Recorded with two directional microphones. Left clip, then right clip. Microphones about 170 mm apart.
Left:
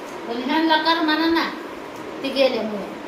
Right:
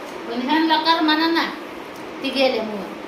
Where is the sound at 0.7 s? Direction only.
25° right (ahead or behind).